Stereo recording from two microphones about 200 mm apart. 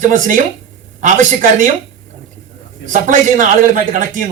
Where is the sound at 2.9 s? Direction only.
40° right (ahead or behind).